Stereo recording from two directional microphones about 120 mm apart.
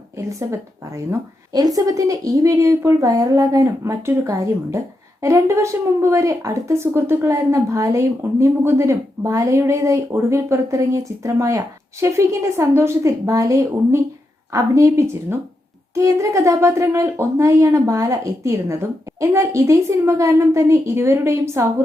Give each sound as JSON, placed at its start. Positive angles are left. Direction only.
{"t": 0.3, "sound": "a woman's voice", "side_deg": -25}